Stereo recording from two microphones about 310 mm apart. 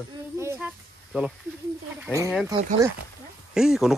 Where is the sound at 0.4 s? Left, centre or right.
Centre.